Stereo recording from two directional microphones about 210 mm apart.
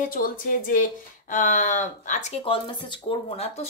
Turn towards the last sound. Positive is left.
turn(degrees=30)  # may be behind; listen again after turning